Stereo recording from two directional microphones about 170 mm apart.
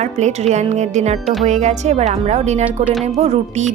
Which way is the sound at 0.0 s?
45° right (ahead or behind).